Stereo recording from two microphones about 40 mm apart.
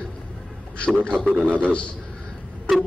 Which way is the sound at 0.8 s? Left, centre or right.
Left.